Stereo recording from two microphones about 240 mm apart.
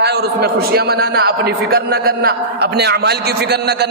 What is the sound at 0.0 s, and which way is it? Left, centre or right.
A man's voice, right.